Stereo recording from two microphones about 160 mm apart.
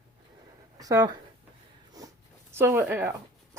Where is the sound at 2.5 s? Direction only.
15° right (ahead or behind).